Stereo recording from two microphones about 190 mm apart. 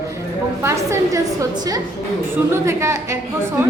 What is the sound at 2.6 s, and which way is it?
Speech, 15° right (ahead or behind).